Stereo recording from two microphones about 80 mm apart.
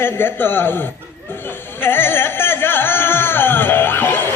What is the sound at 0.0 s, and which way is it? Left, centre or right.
Speech, left.